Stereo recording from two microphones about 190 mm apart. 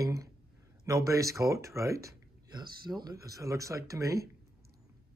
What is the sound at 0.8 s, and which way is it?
Speech, 15° right (ahead or behind).